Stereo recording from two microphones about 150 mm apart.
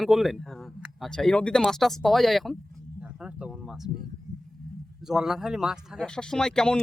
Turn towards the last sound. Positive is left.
turn(degrees=5)  # may be behind; listen again after turning